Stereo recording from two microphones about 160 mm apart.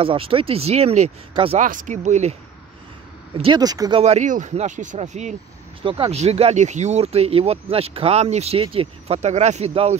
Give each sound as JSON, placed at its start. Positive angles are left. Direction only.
{"t": 0.0, "sound": "speech", "side_deg": -35}
{"t": 1.6, "sound": "speech", "side_deg": -55}
{"t": 3.5, "sound": "speech", "side_deg": -25}
{"t": 4.0, "sound": "speech", "side_deg": -45}
{"t": 5.8, "sound": "speech", "side_deg": -35}